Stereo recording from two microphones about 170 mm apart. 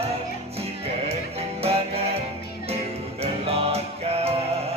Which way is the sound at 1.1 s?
35° right (ahead or behind).